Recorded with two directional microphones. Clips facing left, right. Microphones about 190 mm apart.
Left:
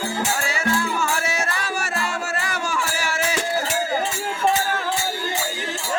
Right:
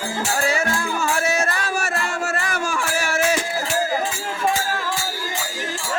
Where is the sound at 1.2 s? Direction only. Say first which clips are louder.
Right 4 dB; 45° right (ahead or behind).